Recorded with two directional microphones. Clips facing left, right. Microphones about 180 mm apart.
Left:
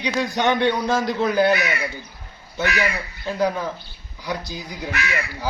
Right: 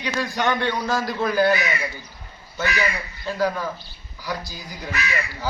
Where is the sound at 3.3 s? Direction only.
20° left (ahead or behind).